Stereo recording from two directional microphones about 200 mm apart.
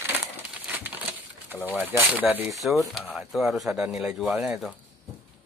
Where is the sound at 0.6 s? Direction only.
10° right (ahead or behind).